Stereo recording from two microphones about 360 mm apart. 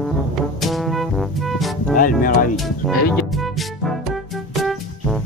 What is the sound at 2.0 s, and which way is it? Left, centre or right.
Speech, left.